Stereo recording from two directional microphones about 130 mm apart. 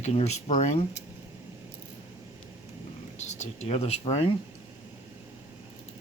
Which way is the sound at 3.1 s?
60° left (ahead or behind).